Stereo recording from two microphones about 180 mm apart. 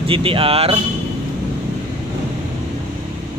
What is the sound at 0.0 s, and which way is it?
Speech, 30° right (ahead or behind).